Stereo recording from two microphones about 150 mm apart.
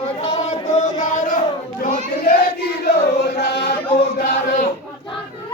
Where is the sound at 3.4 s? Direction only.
90° left.